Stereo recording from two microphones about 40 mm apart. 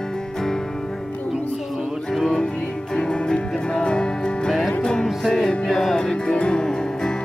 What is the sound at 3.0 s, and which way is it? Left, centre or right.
Music, left.